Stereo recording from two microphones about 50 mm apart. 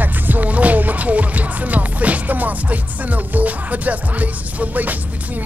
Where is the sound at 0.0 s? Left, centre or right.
Right.